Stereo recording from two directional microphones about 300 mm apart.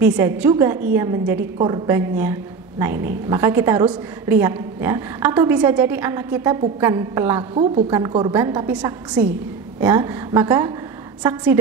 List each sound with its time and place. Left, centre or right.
0.0 s a woman's voice: centre